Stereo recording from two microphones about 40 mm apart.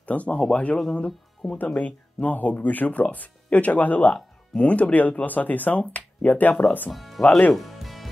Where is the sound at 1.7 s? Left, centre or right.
Left.